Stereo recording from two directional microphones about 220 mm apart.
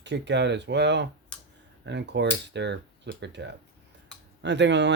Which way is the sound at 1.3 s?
5° left (ahead or behind).